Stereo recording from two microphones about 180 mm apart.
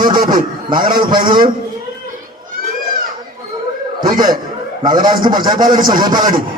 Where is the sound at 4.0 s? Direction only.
25° right (ahead or behind).